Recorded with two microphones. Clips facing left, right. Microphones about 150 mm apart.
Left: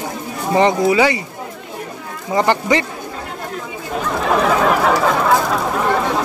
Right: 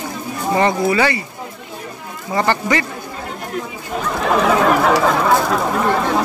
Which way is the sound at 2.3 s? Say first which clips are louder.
Left 2 dB; 15° left (ahead or behind).